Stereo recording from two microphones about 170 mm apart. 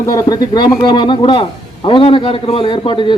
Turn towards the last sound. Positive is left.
turn(degrees=30)  # may be behind; listen again after turning